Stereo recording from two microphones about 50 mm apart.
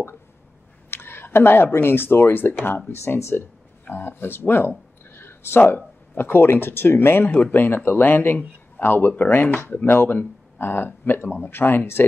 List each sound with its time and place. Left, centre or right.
0.8 s speech: left
3.2 s speech: left
3.8 s speech: left